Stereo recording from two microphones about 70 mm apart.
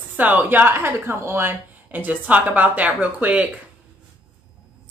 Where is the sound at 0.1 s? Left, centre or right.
Right.